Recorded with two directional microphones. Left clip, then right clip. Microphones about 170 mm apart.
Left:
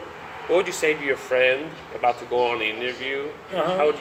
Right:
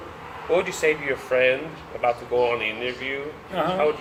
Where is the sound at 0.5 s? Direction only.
65° left (ahead or behind).